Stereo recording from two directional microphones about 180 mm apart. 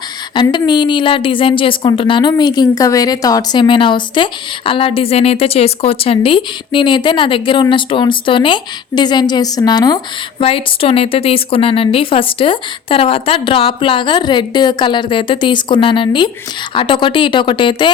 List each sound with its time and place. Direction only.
0.3 s a woman's voice: 25° left (ahead or behind)